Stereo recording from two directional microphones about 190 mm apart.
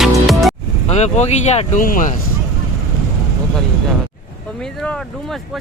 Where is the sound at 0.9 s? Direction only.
35° left (ahead or behind).